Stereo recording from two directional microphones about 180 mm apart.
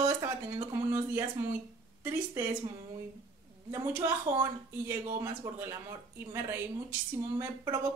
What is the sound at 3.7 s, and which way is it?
A woman's voice, 15° right (ahead or behind).